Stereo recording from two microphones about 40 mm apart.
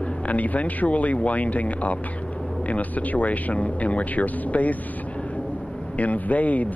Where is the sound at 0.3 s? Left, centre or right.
Left.